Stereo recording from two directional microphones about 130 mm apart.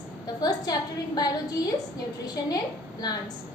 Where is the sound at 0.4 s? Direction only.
30° left (ahead or behind).